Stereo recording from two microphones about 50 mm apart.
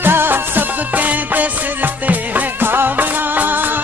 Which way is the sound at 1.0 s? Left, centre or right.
Right.